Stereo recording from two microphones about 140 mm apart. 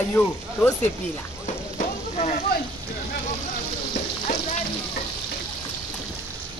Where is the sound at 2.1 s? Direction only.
55° left (ahead or behind).